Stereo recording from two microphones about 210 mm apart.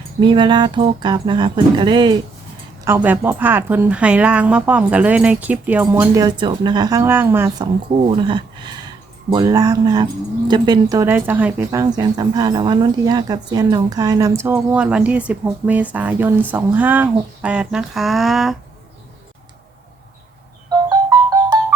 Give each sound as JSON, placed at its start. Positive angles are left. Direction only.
{"t": 0.2, "sound": "speech", "side_deg": -20}
{"t": 2.8, "sound": "speech", "side_deg": -10}
{"t": 20.7, "sound": "music", "side_deg": -20}